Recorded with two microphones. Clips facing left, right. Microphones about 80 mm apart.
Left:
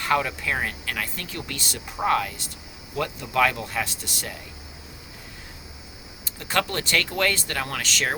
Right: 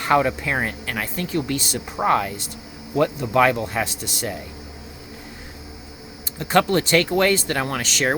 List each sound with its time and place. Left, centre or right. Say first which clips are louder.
0.0 s speech: right 5 dB; right
6.4 s speech: right 8 dB; right